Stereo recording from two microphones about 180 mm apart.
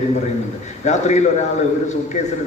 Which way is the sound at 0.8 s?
40° left (ahead or behind).